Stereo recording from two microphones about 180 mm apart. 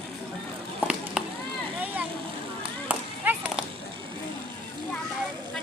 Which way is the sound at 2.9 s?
10° right (ahead or behind).